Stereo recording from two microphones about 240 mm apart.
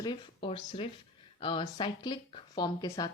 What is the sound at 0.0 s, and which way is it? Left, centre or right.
Speech, centre.